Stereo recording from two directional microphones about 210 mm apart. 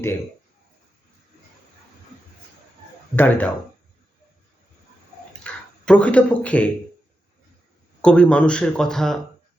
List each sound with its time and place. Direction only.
3.2 s speech: 10° left (ahead or behind)
5.4 s a sound: 5° left (ahead or behind)
8.0 s speech: 5° left (ahead or behind)